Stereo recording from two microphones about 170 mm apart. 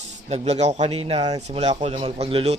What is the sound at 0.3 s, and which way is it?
A man's voice, 40° right (ahead or behind).